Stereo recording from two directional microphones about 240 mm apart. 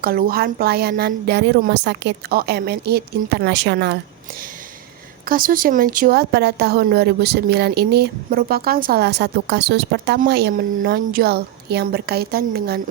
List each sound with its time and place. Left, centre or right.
0.0 s a woman's voice: right
5.2 s a woman's voice: right